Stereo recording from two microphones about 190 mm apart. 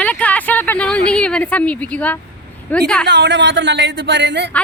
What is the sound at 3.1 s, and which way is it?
Speech, 70° right (ahead or behind).